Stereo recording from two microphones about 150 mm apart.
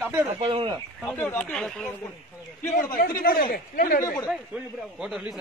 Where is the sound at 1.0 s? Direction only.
10° left (ahead or behind).